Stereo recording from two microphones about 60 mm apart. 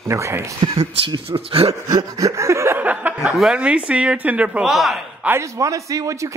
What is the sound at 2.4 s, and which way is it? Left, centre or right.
Speech, right.